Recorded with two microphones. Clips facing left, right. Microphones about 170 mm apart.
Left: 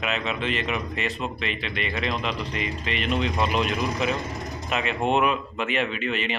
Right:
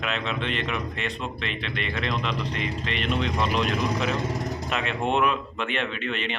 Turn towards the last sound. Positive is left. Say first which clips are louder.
# left 2 dB
turn(degrees=5)  # may be behind; listen again after turning